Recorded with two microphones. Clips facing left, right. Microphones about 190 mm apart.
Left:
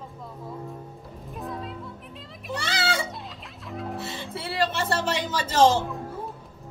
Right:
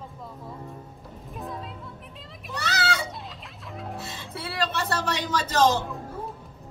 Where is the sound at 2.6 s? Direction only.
25° left (ahead or behind).